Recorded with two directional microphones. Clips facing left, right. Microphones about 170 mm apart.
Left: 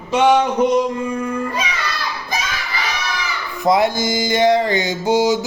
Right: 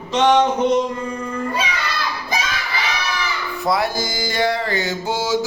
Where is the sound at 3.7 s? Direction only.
20° left (ahead or behind).